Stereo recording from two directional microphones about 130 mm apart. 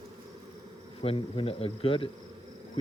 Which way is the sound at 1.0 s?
45° left (ahead or behind).